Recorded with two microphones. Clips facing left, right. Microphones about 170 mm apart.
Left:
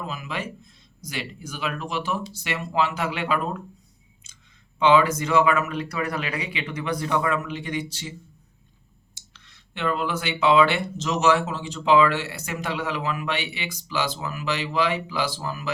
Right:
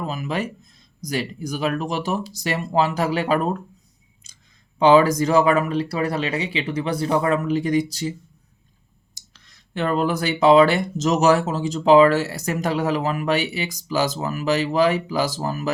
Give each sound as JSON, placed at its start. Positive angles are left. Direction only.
{"t": 0.1, "sound": "speech", "side_deg": -40}
{"t": 4.8, "sound": "speech", "side_deg": -35}
{"t": 9.1, "sound": "speech", "side_deg": -40}